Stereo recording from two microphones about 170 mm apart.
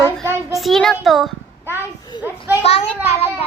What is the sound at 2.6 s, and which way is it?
Speech, 40° left (ahead or behind).